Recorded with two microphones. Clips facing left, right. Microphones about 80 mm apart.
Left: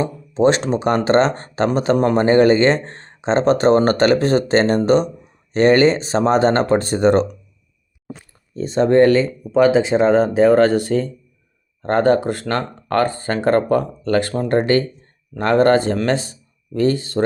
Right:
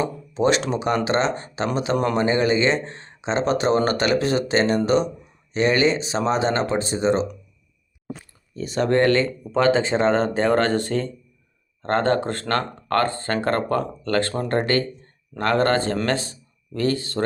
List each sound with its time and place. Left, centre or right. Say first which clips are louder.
0.0 s speech: left 5 dB; left
8.5 s speech: left 6 dB; left